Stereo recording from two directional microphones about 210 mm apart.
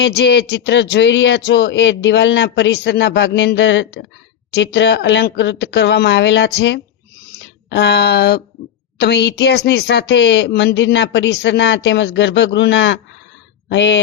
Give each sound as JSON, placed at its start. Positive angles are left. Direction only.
{"t": 0.0, "sound": "speech", "side_deg": 50}